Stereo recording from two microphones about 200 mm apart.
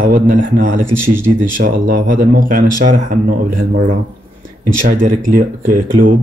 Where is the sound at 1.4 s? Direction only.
45° right (ahead or behind).